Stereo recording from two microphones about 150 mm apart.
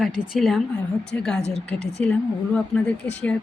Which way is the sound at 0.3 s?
Centre (ahead or behind).